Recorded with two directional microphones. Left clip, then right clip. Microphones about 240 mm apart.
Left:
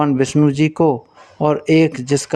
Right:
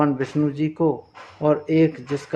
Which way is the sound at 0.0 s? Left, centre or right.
Left.